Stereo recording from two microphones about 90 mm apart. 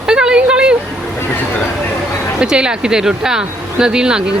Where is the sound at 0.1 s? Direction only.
10° right (ahead or behind).